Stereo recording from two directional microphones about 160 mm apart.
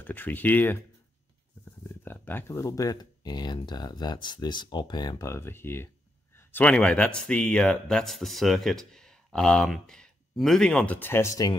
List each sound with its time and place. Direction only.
0.0 s speech: 10° left (ahead or behind)